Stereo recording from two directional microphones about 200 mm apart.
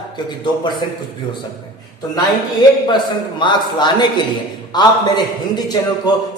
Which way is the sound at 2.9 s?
20° left (ahead or behind).